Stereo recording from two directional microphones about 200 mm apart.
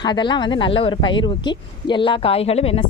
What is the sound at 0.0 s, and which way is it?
Speech, 20° left (ahead or behind).